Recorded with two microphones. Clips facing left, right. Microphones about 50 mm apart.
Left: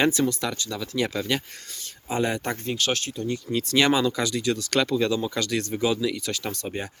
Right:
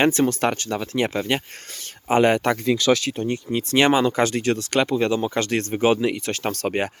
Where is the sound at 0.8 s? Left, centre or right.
Right.